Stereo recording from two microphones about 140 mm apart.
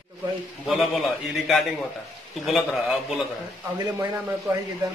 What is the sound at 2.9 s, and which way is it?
Speech, 5° right (ahead or behind).